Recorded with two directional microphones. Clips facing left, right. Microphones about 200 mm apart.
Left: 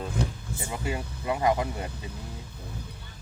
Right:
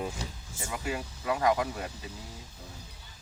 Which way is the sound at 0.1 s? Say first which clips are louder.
Left 9 dB; 60° left (ahead or behind).